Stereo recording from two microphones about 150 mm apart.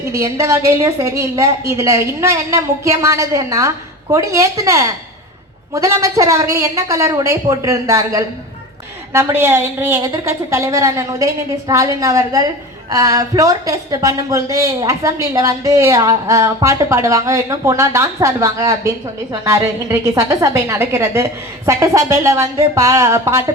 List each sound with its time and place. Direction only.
0.2 s speech: 20° right (ahead or behind)